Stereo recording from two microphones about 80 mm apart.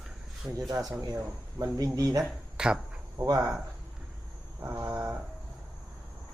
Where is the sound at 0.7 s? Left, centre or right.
Right.